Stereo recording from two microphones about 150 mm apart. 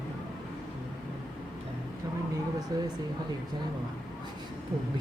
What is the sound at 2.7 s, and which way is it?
Speech, 25° right (ahead or behind).